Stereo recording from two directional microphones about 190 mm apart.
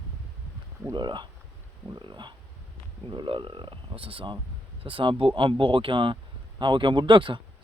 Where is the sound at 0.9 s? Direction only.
25° right (ahead or behind).